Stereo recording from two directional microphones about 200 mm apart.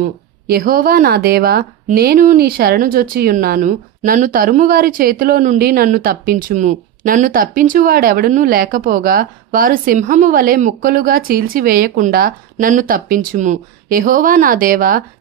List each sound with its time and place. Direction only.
0.5 s a woman's voice: 45° right (ahead or behind)